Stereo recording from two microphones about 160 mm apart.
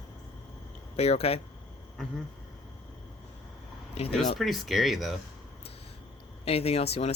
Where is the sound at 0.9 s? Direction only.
40° left (ahead or behind).